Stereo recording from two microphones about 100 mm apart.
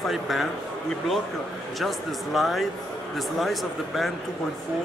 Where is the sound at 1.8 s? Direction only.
Centre (ahead or behind).